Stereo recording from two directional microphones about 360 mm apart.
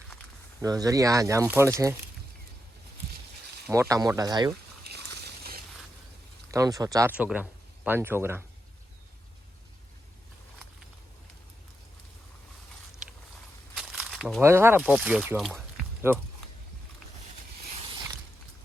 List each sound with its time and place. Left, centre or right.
0.6 s speech: centre
3.7 s speech: centre
4.8 s a sound: right
6.5 s speech: centre
13.7 s speech: centre